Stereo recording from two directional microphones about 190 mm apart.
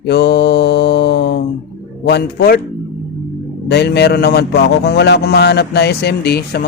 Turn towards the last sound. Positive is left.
turn(degrees=55)  # may be behind; listen again after turning